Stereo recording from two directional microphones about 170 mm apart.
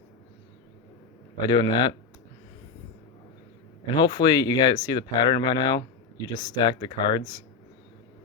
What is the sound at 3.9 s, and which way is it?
Speech, 25° left (ahead or behind).